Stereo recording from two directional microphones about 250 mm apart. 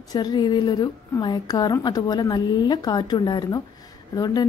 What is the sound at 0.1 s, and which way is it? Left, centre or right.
A woman's voice, centre.